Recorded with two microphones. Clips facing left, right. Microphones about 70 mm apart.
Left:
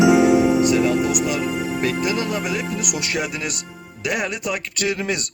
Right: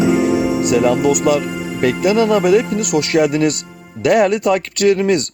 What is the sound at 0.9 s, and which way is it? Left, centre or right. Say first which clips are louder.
Speech: right 6 dB; right.